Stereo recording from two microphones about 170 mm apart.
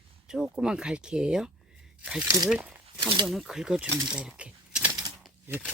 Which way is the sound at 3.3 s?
Centre (ahead or behind).